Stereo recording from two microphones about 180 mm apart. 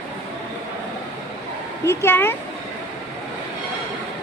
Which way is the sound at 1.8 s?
15° left (ahead or behind).